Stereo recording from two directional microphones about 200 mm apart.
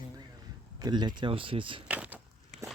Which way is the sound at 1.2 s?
25° right (ahead or behind).